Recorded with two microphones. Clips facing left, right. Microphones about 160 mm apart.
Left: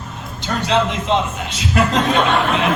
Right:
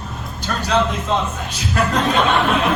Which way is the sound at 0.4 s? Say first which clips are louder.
Left 1 dB; 20° left (ahead or behind).